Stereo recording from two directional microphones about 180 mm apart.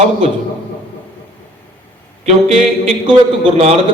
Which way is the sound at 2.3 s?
40° right (ahead or behind).